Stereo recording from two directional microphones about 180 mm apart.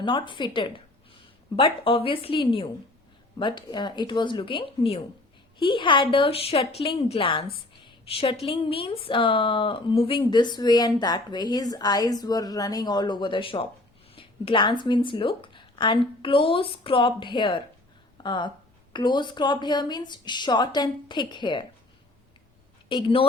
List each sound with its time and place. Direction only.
0.0 s a woman's voice: 25° left (ahead or behind)
22.9 s a woman's voice: 30° left (ahead or behind)